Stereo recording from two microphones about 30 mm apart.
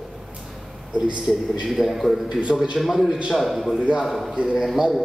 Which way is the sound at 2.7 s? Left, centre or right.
Centre.